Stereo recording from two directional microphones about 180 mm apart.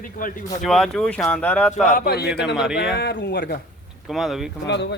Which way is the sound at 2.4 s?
5° right (ahead or behind).